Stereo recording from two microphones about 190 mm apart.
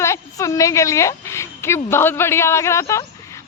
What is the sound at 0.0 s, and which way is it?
Speech, 15° left (ahead or behind).